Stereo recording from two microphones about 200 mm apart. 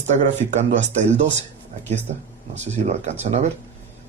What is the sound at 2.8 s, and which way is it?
Speech, 35° right (ahead or behind).